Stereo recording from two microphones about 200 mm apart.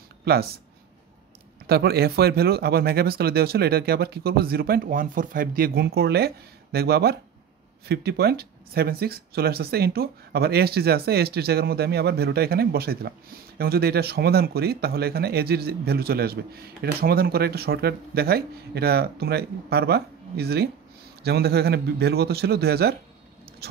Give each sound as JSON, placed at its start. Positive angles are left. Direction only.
{"t": 0.2, "sound": "speech", "side_deg": -55}
{"t": 1.7, "sound": "speech", "side_deg": -50}